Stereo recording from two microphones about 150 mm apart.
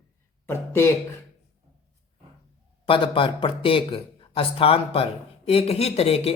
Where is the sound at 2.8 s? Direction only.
35° left (ahead or behind).